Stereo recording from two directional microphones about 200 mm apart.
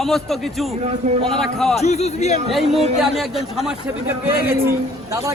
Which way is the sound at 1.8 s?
35° left (ahead or behind).